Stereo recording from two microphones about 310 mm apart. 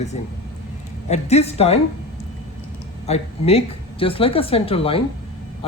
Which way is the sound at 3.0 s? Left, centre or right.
Centre.